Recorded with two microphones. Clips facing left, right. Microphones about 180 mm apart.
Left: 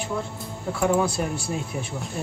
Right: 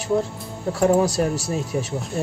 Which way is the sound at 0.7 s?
40° right (ahead or behind).